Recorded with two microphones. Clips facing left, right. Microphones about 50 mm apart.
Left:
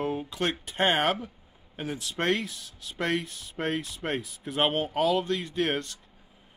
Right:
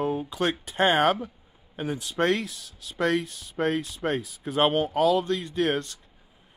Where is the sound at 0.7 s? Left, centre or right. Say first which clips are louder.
Right 4 dB; left.